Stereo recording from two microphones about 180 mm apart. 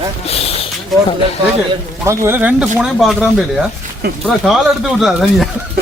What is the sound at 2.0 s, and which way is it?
Speech, 15° right (ahead or behind).